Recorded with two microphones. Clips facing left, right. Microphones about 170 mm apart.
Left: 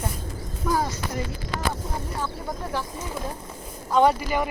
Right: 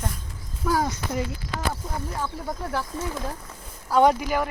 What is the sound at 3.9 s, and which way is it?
Speech, 15° right (ahead or behind).